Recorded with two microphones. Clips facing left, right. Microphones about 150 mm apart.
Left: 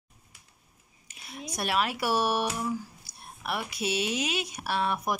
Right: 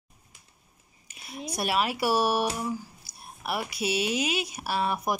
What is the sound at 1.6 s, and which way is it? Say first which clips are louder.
Speech: right 2 dB; 5° right (ahead or behind).